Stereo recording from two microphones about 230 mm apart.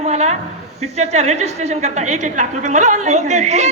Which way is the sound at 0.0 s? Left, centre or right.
Right.